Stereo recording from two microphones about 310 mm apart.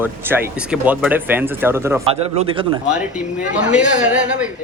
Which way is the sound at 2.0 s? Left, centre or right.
Centre.